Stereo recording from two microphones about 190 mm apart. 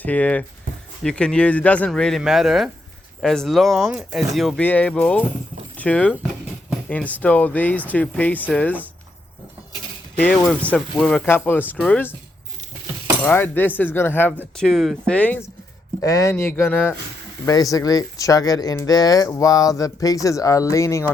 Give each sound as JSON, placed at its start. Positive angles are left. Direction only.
{"t": 0.0, "sound": "speech", "side_deg": 5}
{"t": 10.2, "sound": "speech", "side_deg": 5}
{"t": 13.2, "sound": "speech", "side_deg": 10}